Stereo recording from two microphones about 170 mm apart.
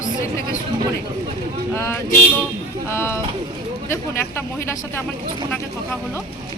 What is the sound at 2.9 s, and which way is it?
A woman's voice, 15° left (ahead or behind).